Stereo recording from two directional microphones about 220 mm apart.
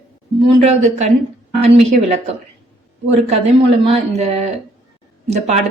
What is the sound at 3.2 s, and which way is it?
A woman's voice, 30° right (ahead or behind).